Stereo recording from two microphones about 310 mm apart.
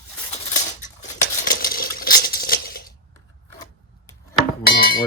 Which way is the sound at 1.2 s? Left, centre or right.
Left.